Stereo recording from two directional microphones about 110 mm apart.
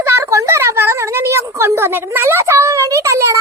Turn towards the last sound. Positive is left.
turn(degrees=-25)  # may be behind; listen again after turning